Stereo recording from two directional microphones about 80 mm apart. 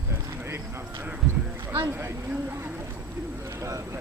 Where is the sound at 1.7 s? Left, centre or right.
Right.